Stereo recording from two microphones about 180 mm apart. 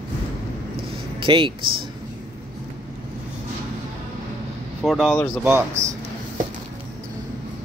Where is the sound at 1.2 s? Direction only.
30° right (ahead or behind).